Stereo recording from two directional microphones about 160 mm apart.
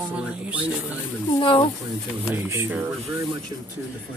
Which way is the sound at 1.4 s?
30° left (ahead or behind).